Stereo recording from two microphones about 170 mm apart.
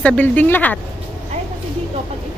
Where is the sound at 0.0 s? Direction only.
10° left (ahead or behind).